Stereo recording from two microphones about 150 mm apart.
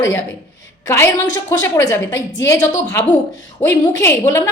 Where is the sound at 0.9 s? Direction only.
20° left (ahead or behind).